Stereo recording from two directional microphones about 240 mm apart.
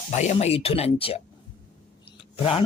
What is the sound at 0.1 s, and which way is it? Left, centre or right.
Speech, left.